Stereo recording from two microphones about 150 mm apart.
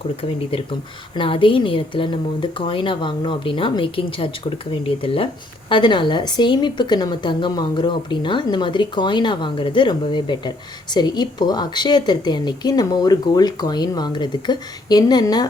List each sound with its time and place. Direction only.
0.2 s a woman's voice: 35° left (ahead or behind)